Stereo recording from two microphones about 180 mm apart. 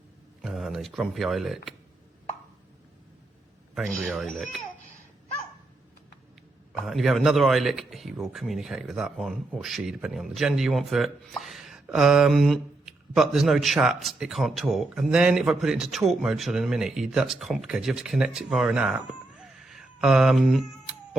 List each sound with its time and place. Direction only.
0.4 s speech: centre (ahead or behind)
3.8 s speech: centre (ahead or behind)
6.8 s speech: centre (ahead or behind)